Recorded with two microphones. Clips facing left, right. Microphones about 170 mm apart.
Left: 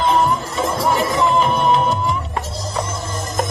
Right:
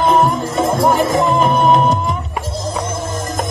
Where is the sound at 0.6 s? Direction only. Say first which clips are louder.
Right 6 dB; 45° right (ahead or behind).